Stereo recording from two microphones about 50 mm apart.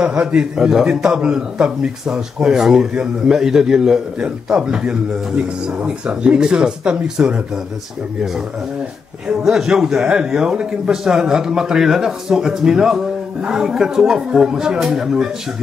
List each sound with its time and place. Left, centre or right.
0.0 s speech: right
9.4 s speech: centre